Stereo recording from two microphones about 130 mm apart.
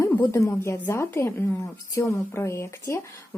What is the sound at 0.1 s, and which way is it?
A woman's voice, 20° left (ahead or behind).